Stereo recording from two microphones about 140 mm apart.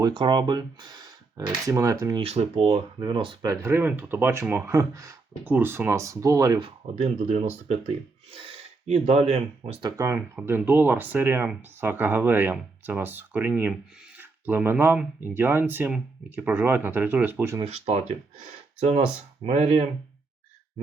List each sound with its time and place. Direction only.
0.0 s speech: 35° right (ahead or behind)
2.2 s speech: 45° right (ahead or behind)
3.0 s speech: 35° right (ahead or behind)
3.5 s speech: 20° right (ahead or behind)
6.6 s speech: 45° right (ahead or behind)
9.8 s speech: 20° right (ahead or behind)
17.6 s speech: 50° right (ahead or behind)